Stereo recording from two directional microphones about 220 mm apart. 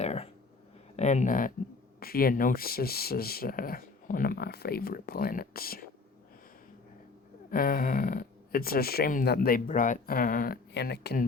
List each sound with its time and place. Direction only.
0.0 s a sound: 30° left (ahead or behind)
0.9 s speech: 30° left (ahead or behind)
7.5 s speech: 40° left (ahead or behind)